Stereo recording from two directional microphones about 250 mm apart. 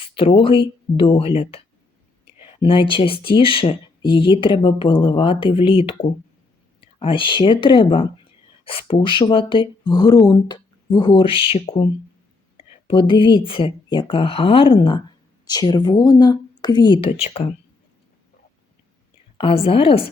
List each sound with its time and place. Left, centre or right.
0.0 s speech: left
19.4 s speech: left